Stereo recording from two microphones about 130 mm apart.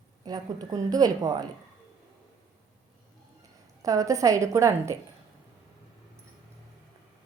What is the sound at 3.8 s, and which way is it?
A woman's voice, 25° right (ahead or behind).